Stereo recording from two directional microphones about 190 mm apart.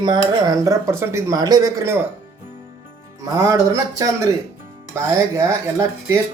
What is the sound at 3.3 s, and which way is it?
Speech, 20° right (ahead or behind).